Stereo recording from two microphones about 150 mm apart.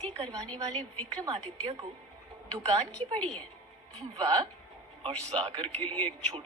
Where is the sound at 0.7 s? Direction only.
10° left (ahead or behind).